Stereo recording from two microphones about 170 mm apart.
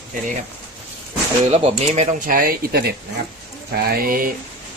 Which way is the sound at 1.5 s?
40° right (ahead or behind).